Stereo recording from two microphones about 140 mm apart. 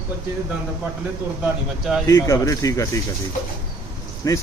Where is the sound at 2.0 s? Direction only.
25° left (ahead or behind).